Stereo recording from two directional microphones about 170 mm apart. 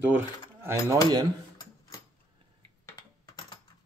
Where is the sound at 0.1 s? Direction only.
15° right (ahead or behind).